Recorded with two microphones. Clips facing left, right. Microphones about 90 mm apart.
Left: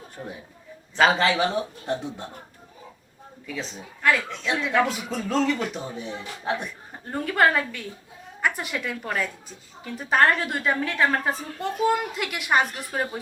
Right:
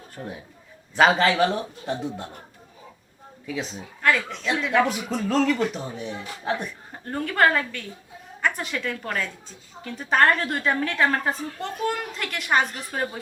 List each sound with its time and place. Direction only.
0.2 s a woman's voice: 5° left (ahead or behind)
3.4 s a woman's voice: 5° right (ahead or behind)